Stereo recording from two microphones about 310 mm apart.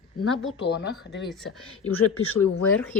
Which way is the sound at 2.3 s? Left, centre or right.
Left.